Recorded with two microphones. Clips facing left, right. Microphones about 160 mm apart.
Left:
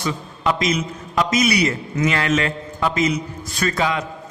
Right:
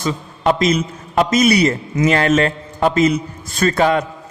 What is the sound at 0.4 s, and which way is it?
A man's voice, 45° right (ahead or behind).